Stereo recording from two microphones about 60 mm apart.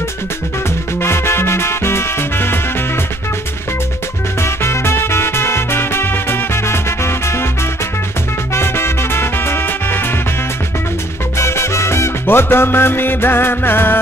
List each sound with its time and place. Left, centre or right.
1.0 s music: left
4.4 s music: left
8.5 s music: left
11.3 s salsa music: left
12.3 s music: left